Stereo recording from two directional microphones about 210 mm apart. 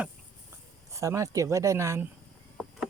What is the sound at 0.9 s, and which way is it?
Speech, 15° right (ahead or behind).